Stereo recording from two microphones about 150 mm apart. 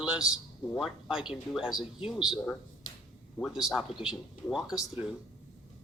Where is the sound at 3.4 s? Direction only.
Centre (ahead or behind).